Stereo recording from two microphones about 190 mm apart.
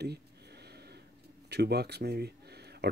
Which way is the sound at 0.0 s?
60° right (ahead or behind).